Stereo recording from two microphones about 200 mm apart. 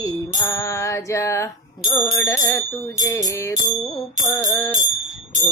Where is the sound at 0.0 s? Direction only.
15° left (ahead or behind).